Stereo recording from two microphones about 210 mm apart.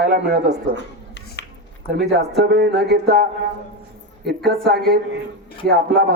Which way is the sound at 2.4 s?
50° right (ahead or behind).